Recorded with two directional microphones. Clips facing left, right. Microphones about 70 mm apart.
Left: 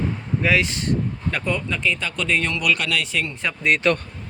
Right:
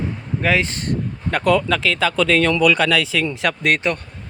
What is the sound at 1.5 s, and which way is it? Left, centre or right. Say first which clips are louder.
Speech: right 8 dB; right.